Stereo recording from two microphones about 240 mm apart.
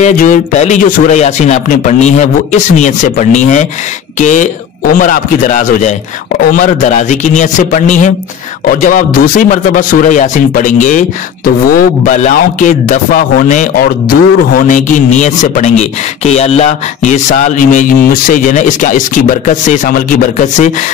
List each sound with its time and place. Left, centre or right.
0.0 s speech: left